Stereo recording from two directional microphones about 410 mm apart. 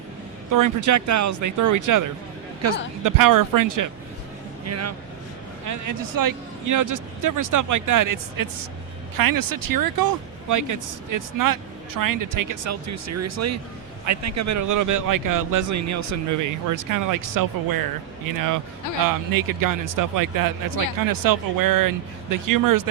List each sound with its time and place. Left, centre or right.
0.5 s speech: right
4.6 s speech: right